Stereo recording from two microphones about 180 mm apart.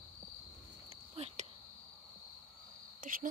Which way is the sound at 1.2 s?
35° right (ahead or behind).